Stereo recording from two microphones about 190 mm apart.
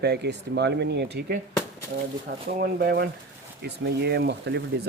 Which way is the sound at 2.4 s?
50° right (ahead or behind).